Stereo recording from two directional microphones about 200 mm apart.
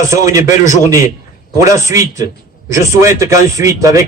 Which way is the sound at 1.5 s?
15° right (ahead or behind).